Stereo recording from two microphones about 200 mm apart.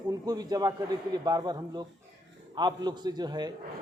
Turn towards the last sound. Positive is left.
turn(degrees=-20)  # may be behind; listen again after turning